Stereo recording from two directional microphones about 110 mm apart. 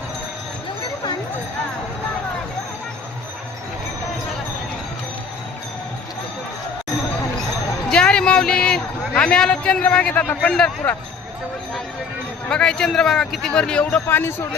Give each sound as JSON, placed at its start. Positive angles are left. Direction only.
{"t": 7.9, "sound": "a man's voice", "side_deg": 10}
{"t": 12.5, "sound": "a man's voice", "side_deg": 5}
{"t": 14.2, "sound": "a man's voice", "side_deg": 20}